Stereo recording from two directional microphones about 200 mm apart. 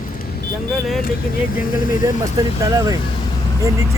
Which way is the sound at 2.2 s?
15° right (ahead or behind).